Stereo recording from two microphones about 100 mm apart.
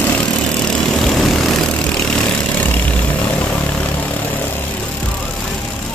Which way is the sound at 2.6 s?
15° left (ahead or behind).